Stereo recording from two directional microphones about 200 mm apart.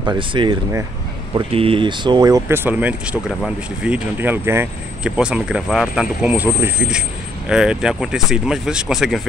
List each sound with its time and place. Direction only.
0.0 s speech: 25° right (ahead or behind); by 9.2 s centre (ahead or behind)